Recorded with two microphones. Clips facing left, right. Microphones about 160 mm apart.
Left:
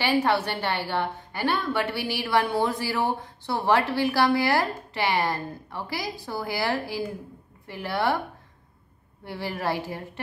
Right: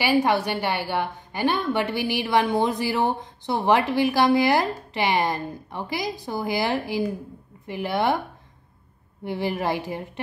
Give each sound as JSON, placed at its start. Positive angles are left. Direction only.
{"t": 0.0, "sound": "a woman's voice", "side_deg": -15}
{"t": 9.2, "sound": "a woman's voice", "side_deg": -20}